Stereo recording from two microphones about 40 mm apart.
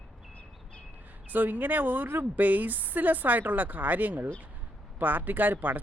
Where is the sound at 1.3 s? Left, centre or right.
Right.